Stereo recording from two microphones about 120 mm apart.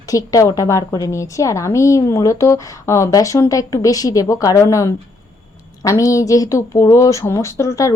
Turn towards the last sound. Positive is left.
turn(degrees=25)  # may be behind; listen again after turning